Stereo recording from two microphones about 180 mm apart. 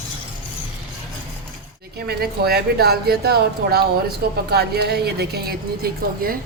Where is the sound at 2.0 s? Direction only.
60° right (ahead or behind).